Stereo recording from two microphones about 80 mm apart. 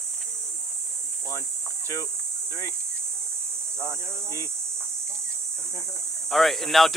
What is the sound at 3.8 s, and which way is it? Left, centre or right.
Speech, left.